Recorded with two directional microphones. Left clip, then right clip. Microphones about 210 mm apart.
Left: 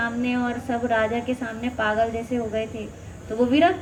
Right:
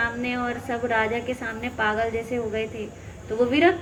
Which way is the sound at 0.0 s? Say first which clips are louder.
Even; 25° right (ahead or behind).